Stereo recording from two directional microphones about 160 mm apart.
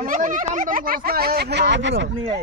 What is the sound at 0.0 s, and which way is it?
Speech, 55° right (ahead or behind).